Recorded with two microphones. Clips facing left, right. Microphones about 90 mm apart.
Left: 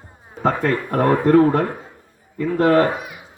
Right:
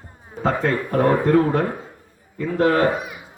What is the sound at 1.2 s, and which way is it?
Speech, 35° left (ahead or behind).